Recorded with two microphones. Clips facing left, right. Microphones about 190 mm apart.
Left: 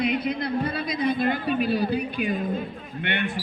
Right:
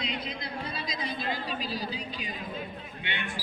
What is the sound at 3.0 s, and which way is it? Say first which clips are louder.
Speech: left 10 dB; 60° left (ahead or behind).